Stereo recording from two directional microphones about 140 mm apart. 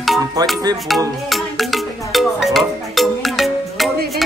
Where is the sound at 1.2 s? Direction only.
Centre (ahead or behind).